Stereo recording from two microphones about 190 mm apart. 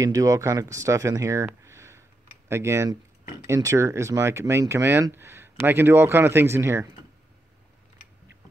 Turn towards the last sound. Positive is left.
turn(degrees=-15)  # may be behind; listen again after turning